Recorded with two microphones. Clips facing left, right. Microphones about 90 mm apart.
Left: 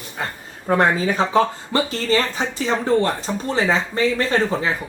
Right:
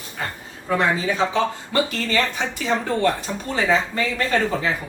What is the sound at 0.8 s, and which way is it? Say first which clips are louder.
Speech: left 2 dB; 45° left (ahead or behind).